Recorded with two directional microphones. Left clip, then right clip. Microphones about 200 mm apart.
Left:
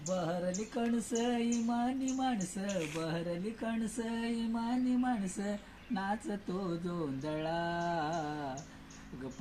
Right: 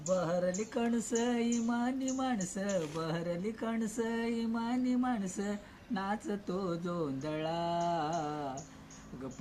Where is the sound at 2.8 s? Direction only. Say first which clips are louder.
Right 1 dB; 20° right (ahead or behind).